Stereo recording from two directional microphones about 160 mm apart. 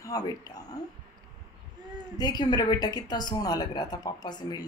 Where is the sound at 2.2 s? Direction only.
25° left (ahead or behind).